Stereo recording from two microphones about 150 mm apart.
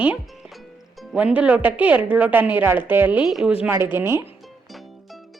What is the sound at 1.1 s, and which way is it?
A woman's voice, 10° right (ahead or behind).